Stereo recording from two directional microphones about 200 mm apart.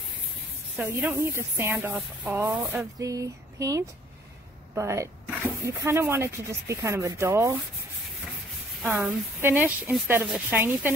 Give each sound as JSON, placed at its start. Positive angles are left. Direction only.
{"t": 0.8, "sound": "speech", "side_deg": -10}
{"t": 8.8, "sound": "speech", "side_deg": -5}